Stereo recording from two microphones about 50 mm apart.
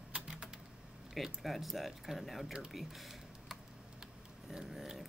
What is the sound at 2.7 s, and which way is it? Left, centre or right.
Typing, centre.